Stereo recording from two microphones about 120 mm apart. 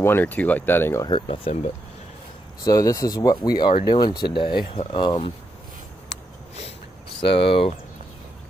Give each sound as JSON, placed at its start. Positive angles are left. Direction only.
{"t": 0.0, "sound": "speech", "side_deg": 15}
{"t": 1.0, "sound": "speech", "side_deg": 45}
{"t": 2.6, "sound": "speech", "side_deg": 30}
{"t": 7.2, "sound": "speech", "side_deg": 50}